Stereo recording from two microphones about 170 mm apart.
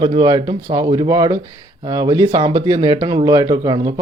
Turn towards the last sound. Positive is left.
turn(degrees=-25)  # may be behind; listen again after turning